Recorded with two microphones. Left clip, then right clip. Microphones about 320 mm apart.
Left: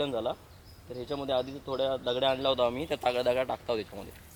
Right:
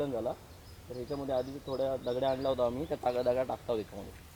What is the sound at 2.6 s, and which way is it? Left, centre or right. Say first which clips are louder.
Speech: left 3 dB; centre.